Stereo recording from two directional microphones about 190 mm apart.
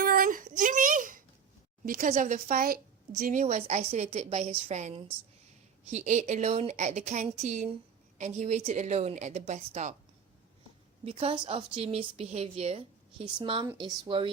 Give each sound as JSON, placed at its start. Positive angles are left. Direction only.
{"t": 0.0, "sound": "a sound", "side_deg": -50}
{"t": 1.8, "sound": "a woman's voice", "side_deg": -45}
{"t": 11.0, "sound": "speech", "side_deg": -30}